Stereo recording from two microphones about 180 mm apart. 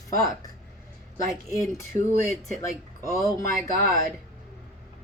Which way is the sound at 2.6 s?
15° left (ahead or behind).